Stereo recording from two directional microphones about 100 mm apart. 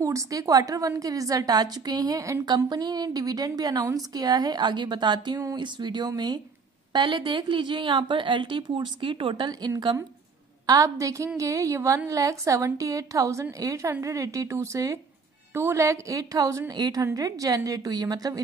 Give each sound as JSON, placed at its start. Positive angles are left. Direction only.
{"t": 0.0, "sound": "a woman's voice", "side_deg": -35}
{"t": 2.4, "sound": "a woman's voice", "side_deg": -45}
{"t": 17.0, "sound": "a woman's voice", "side_deg": -35}